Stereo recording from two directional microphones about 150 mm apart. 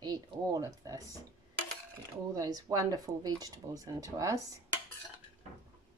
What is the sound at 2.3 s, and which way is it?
Speech, 25° right (ahead or behind).